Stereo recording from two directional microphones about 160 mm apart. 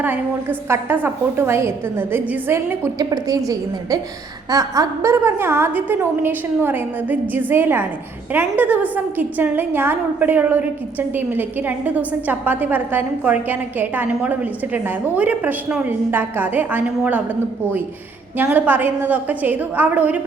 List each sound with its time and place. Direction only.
0.0 s a woman's voice: 10° right (ahead or behind)
18.3 s a woman's voice: 10° right (ahead or behind)